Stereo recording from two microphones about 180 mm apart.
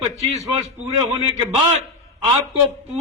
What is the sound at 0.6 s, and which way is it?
Speech, 30° right (ahead or behind).